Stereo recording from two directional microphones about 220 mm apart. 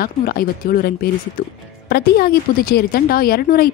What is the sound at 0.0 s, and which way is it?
A woman's voice, 40° left (ahead or behind).